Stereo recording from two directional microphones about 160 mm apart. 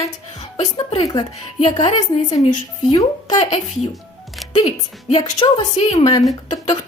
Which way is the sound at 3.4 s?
40° left (ahead or behind).